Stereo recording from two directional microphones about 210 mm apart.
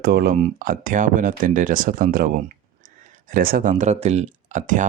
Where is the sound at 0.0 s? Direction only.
45° right (ahead or behind).